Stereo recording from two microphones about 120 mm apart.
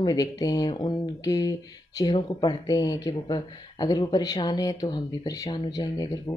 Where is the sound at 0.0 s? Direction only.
30° left (ahead or behind).